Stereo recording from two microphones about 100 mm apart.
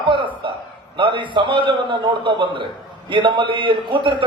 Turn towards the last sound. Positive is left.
turn(degrees=-55)  # may be behind; listen again after turning